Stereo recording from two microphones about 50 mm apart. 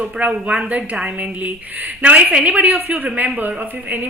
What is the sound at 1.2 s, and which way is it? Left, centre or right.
A woman's voice, right.